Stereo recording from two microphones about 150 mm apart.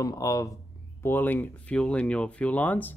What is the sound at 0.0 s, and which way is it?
Speech, 20° left (ahead or behind).